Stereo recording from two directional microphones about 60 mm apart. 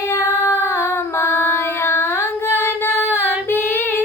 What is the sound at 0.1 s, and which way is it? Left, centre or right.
Female singing, left.